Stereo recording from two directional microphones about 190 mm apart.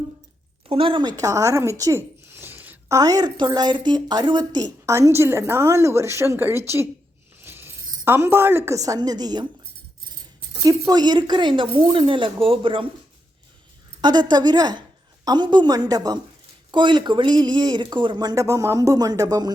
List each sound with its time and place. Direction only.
0.7 s speech: 30° right (ahead or behind); by 6.8 s 15° right (ahead or behind)
7.3 s coin: 10° right (ahead or behind)
8.0 s speech: 10° right (ahead or behind)
10.6 s speech: 20° right (ahead or behind)
14.0 s a woman's voice: 20° right (ahead or behind)